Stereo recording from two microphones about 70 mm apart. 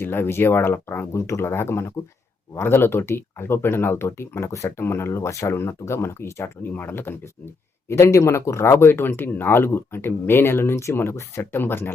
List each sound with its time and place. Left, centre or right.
0.0 s speech: left
7.9 s speech: left